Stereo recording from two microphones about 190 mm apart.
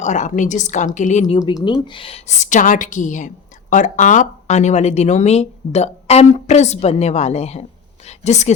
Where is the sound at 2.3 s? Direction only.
40° left (ahead or behind).